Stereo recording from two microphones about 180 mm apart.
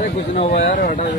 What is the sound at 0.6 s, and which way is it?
Speech, 50° left (ahead or behind).